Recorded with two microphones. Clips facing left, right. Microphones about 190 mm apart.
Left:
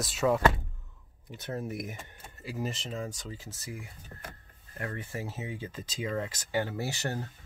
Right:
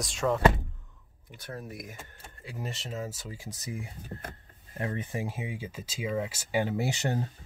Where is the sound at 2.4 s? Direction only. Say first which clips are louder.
Left 4 dB; centre (ahead or behind); by 7.2 s 20° right (ahead or behind).